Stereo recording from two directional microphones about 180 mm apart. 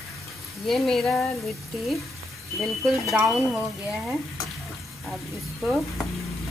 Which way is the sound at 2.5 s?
Centre (ahead or behind).